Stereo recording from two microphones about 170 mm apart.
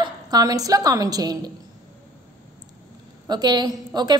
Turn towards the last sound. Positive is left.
turn(degrees=-25)  # may be behind; listen again after turning